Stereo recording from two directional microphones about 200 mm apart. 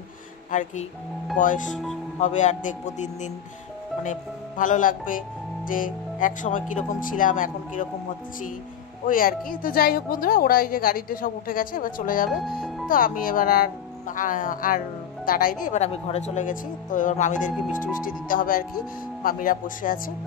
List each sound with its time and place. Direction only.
0.5 s a woman's voice: 40° left (ahead or behind)
9.0 s a woman's voice: 45° left (ahead or behind)
12.3 s speech: centre (ahead or behind)
12.8 s a woman's voice: 45° left (ahead or behind)